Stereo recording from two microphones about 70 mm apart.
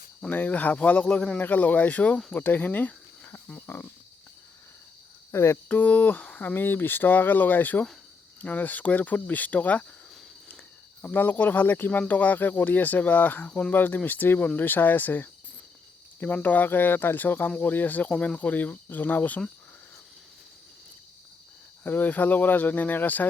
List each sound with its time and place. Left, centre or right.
0.2 s speech: left
1.1 s a man's voice: centre
1.4 s speech: left
5.3 s a sound: left
5.6 s speech: left
11.0 s speech: left
21.8 s speech: left